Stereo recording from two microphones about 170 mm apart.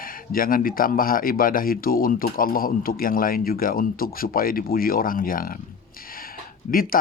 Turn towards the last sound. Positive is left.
turn(degrees=60)  # may be behind; listen again after turning